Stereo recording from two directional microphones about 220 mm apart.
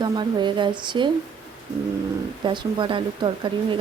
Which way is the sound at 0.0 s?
20° right (ahead or behind).